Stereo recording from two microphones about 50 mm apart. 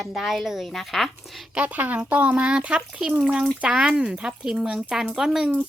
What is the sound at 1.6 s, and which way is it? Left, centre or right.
A woman's voice, right.